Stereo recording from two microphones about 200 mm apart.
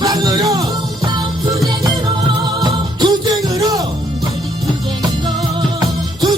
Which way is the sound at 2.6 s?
20° right (ahead or behind).